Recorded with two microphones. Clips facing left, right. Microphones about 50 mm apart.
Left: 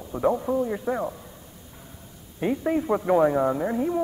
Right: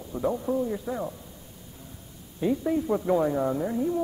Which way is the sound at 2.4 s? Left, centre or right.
Left.